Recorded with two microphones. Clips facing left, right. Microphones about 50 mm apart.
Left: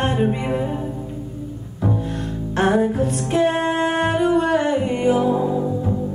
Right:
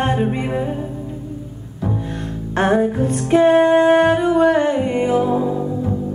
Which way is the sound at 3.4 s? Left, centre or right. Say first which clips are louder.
Right 9 dB; right.